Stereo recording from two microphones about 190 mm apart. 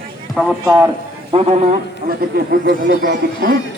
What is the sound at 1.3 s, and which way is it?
Speech, 35° right (ahead or behind).